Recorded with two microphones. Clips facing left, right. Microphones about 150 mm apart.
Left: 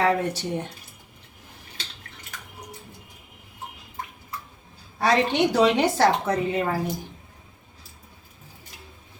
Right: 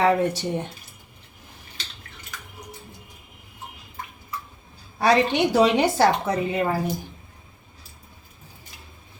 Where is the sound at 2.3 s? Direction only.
55° left (ahead or behind).